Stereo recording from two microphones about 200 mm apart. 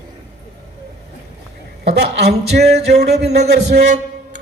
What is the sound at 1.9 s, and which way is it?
Speech, 55° right (ahead or behind).